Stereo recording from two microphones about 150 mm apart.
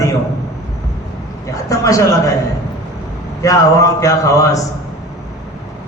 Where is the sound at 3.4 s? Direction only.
20° left (ahead or behind).